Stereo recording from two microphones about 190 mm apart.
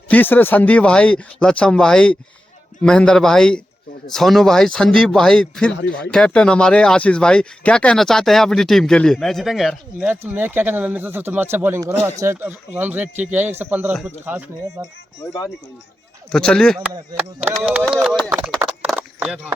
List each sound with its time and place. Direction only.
0.1 s speech: 10° left (ahead or behind); by 14.5 s 10° right (ahead or behind)
15.2 s speech: 20° left (ahead or behind)
16.3 s speech: 5° left (ahead or behind)
18.8 s a sound: 10° right (ahead or behind)